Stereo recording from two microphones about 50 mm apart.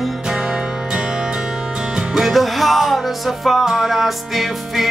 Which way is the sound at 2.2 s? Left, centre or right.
Centre.